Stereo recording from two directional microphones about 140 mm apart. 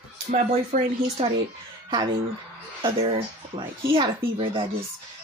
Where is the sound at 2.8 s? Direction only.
35° right (ahead or behind).